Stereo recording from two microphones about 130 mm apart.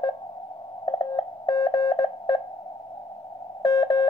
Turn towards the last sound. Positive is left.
turn(degrees=30)  # may be behind; listen again after turning